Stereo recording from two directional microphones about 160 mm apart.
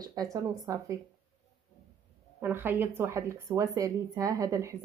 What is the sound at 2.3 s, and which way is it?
A woman's voice, 15° right (ahead or behind).